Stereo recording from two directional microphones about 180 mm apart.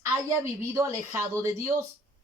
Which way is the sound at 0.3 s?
15° right (ahead or behind).